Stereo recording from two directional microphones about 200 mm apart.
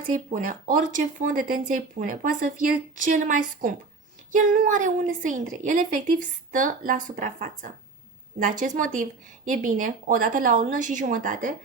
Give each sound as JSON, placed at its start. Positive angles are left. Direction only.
{"t": 0.1, "sound": "speech", "side_deg": -40}